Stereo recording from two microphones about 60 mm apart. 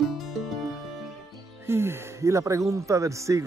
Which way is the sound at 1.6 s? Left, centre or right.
Right.